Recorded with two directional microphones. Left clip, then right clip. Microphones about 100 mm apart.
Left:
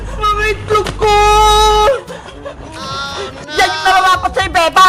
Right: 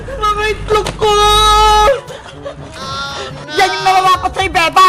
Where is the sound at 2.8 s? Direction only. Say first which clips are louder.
Even; centre (ahead or behind).